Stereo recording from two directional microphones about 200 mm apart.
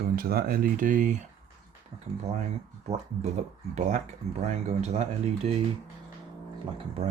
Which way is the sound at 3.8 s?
35° right (ahead or behind).